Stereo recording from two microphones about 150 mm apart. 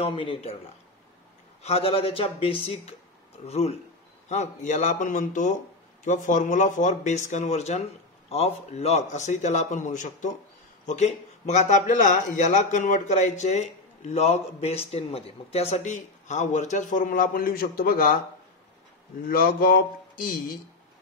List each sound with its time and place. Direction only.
0.0 s speech: 35° left (ahead or behind)
1.6 s a man's voice: 40° left (ahead or behind); by 18.2 s 70° left (ahead or behind)
19.2 s speech: 70° left (ahead or behind)